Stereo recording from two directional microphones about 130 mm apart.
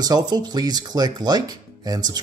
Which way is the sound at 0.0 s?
30° right (ahead or behind).